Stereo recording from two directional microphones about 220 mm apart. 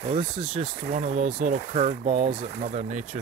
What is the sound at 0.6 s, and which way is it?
Speech, 35° right (ahead or behind).